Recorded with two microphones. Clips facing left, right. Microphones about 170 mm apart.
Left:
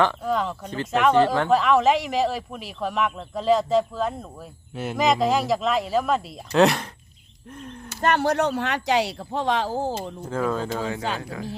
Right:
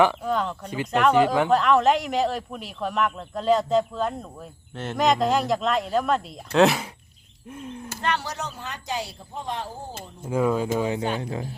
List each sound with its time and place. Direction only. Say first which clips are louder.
0.0 s speech: right 2 dB; 10° right (ahead or behind)
0.3 s speech: left 1 dB; centre (ahead or behind)
8.0 s speech: left 8 dB; 55° left (ahead or behind); by 10.1 s 90° left
10.2 s speech: right 4 dB; 10° right (ahead or behind)